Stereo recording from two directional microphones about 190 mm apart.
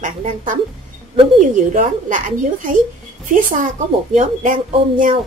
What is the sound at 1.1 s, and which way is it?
A woman's voice, 35° right (ahead or behind).